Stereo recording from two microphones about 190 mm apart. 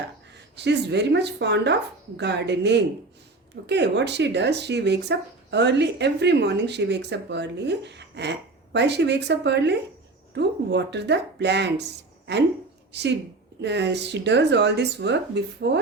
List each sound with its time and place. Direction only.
0.5 s speech: 65° right (ahead or behind)
12.9 s speech: 65° right (ahead or behind)